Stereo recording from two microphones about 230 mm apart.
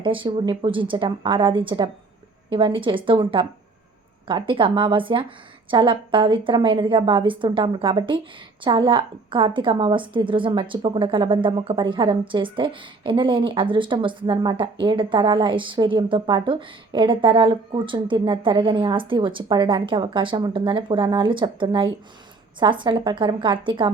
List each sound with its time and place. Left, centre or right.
0.0 s a woman's voice: right